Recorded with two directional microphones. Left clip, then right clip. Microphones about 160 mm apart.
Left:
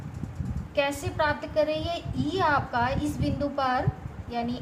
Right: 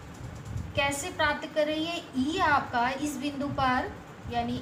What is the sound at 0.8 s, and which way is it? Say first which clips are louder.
A woman's voice: even; 60° left (ahead or behind).